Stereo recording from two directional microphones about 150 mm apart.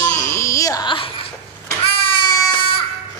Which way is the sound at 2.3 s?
35° left (ahead or behind).